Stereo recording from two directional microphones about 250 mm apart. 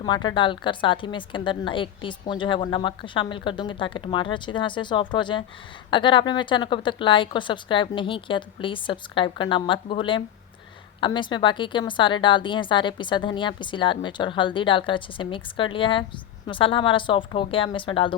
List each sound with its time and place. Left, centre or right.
0.0 s a woman's voice: centre